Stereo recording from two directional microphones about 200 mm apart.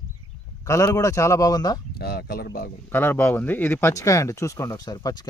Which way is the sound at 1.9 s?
50° left (ahead or behind).